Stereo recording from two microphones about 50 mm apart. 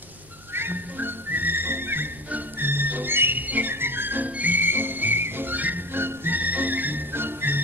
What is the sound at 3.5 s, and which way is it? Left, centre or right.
Whistle, right.